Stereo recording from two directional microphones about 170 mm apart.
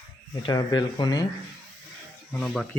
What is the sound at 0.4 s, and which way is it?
Speech, 25° left (ahead or behind).